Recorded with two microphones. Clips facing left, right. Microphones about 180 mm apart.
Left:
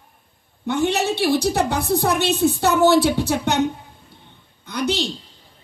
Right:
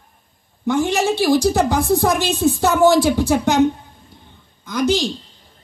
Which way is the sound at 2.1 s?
65° left (ahead or behind).